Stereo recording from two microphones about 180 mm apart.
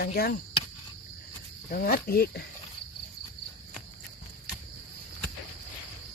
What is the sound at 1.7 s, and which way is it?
Speech, 55° left (ahead or behind).